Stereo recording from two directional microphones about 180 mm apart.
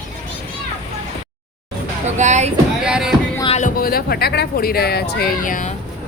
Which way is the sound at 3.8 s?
55° left (ahead or behind).